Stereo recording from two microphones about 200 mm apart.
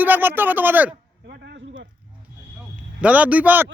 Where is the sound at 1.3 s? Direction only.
55° right (ahead or behind).